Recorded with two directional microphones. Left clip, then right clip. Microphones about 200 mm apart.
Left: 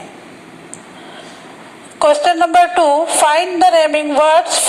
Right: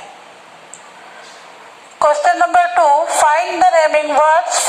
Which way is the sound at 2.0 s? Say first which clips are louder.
Left 1 dB; 40° left (ahead or behind).